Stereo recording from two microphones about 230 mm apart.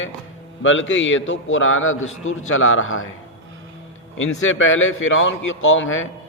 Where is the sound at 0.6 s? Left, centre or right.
Left.